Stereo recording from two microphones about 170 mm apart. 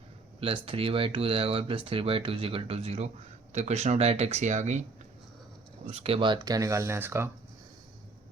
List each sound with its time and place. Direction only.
0.3 s speech: 35° right (ahead or behind)
5.9 s speech: 35° right (ahead or behind); by 7.3 s 15° right (ahead or behind)